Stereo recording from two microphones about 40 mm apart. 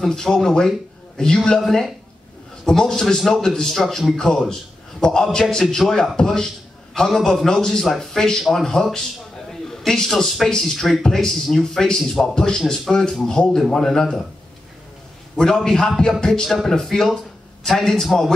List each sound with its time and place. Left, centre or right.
0.0 s a man's voice: centre
9.5 s a sound: centre
10.4 s speech: centre
15.3 s speech: centre